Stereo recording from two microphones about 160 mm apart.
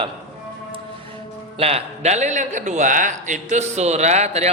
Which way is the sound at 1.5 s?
40° right (ahead or behind).